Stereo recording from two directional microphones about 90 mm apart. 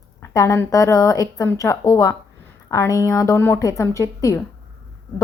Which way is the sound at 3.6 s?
40° left (ahead or behind).